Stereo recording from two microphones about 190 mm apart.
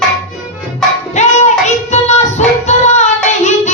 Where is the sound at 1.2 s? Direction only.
40° left (ahead or behind).